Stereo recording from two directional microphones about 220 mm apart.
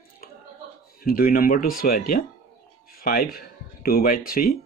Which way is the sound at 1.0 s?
40° left (ahead or behind).